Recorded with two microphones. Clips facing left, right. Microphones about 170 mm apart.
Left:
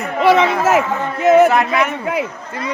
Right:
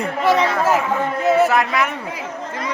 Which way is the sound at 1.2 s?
80° left.